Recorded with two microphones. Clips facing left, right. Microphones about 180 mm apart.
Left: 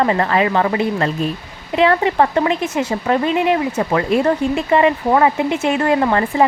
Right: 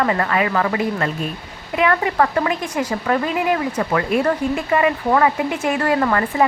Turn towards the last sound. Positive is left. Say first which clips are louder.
# left 2 dB
turn(degrees=25)  # may be behind; listen again after turning